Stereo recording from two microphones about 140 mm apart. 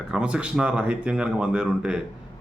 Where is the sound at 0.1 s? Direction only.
5° right (ahead or behind).